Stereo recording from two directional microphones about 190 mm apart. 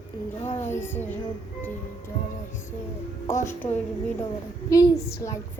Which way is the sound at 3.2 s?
15° left (ahead or behind).